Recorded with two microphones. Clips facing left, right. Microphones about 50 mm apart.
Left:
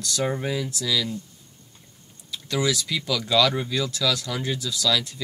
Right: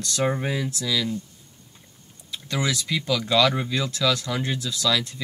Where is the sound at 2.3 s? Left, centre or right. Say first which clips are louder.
Left 2 dB; centre.